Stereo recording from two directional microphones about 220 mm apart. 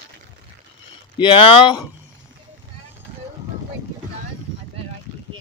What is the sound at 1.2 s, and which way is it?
Speech, 25° left (ahead or behind).